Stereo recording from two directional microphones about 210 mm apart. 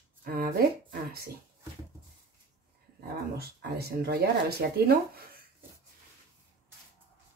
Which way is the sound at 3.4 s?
50° right (ahead or behind).